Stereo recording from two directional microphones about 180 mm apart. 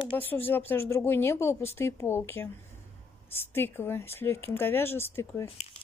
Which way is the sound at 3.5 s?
10° left (ahead or behind).